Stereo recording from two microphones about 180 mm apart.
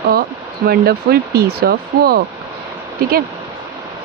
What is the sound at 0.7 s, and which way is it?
Speech, 60° right (ahead or behind).